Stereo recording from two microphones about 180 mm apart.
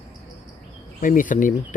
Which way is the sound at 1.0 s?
50° left (ahead or behind).